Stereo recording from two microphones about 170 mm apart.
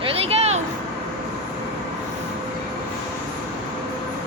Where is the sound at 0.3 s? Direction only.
40° right (ahead or behind).